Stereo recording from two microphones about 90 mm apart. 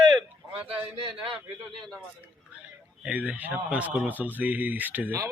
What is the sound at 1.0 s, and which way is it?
Speech, 70° right (ahead or behind).